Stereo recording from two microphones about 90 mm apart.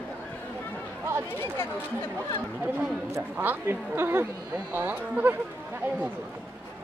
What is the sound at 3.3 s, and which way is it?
Speech, 25° right (ahead or behind).